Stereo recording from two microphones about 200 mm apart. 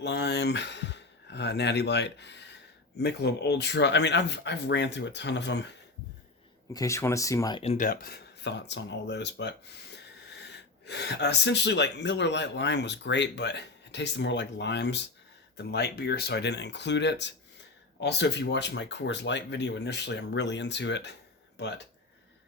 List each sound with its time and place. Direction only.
0.0 s speech: 55° left (ahead or behind)
6.7 s speech: 15° left (ahead or behind)
7.6 s speech: 30° left (ahead or behind)
7.9 s speech: 50° left (ahead or behind)